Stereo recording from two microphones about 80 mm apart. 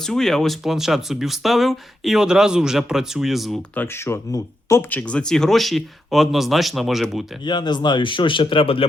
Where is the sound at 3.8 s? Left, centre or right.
Left.